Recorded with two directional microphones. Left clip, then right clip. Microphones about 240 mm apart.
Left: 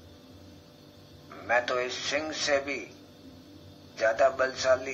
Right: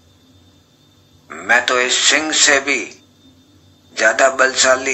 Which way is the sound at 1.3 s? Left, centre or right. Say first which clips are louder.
Right 13 dB; right.